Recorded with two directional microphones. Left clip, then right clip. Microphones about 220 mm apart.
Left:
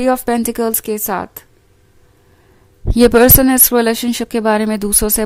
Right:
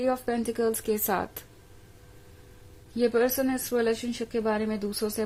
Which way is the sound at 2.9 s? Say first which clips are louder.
Left 15 dB; 45° left (ahead or behind).